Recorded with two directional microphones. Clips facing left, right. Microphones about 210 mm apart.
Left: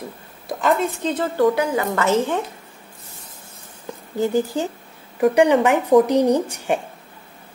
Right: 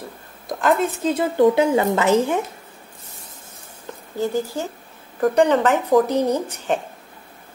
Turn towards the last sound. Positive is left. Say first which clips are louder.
# left 3 dB
turn(degrees=15)  # may be behind; listen again after turning